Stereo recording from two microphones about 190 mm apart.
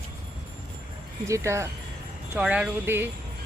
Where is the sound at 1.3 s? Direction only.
15° right (ahead or behind).